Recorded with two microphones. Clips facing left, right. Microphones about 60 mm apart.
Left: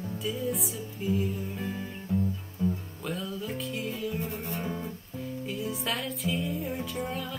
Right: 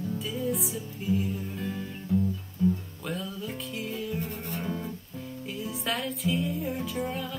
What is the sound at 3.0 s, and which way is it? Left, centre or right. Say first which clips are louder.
Music: even; centre.